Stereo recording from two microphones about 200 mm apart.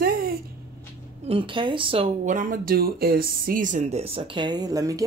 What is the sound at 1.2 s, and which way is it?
Speech, 25° right (ahead or behind).